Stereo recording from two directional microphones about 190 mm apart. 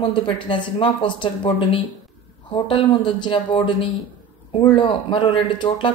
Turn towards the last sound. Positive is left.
turn(degrees=25)  # may be behind; listen again after turning